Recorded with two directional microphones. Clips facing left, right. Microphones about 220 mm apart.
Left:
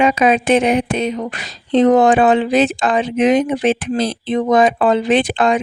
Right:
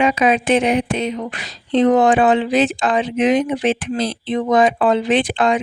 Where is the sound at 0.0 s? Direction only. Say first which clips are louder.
Left 2 dB; 45° left (ahead or behind).